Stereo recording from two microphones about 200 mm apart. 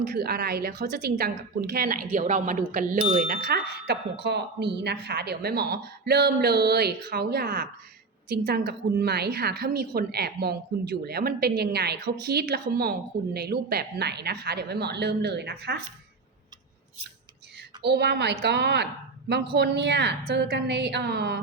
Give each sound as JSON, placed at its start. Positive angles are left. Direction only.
{"t": 0.1, "sound": "a woman's voice", "side_deg": -50}
{"t": 17.6, "sound": "a woman's voice", "side_deg": -55}